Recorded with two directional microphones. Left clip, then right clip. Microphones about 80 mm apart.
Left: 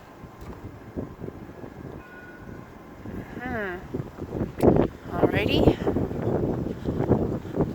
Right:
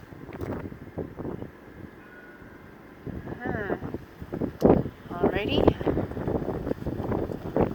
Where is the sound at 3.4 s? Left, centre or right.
Left.